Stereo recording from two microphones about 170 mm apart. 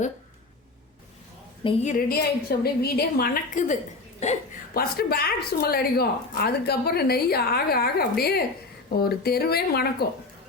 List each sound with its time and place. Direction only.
1.6 s a woman's voice: 30° left (ahead or behind)
2.0 s speech: 65° left (ahead or behind)
4.2 s a woman's voice: 40° left (ahead or behind)
4.7 s speech: 65° left (ahead or behind)